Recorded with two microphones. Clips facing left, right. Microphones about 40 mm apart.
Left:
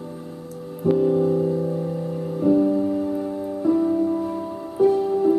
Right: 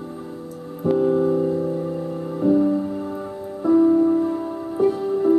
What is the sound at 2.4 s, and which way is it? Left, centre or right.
Music, centre.